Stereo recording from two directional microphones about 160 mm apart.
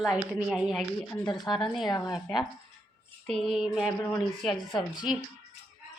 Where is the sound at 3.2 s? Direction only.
Centre (ahead or behind).